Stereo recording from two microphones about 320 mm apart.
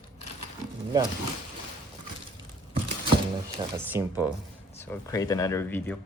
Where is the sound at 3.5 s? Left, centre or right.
Centre.